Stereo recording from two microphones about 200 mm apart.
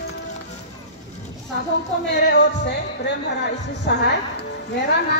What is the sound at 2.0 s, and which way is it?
Music, 60° left (ahead or behind).